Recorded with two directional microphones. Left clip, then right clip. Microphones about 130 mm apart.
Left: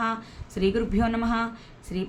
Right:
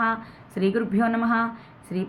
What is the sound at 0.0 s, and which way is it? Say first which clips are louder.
A woman's voice: right 4 dB; 20° left (ahead or behind).